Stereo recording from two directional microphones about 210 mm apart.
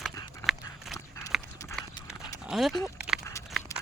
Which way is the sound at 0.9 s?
15° left (ahead or behind).